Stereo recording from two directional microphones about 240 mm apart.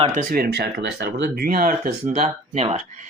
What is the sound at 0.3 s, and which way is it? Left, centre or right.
Speech, right.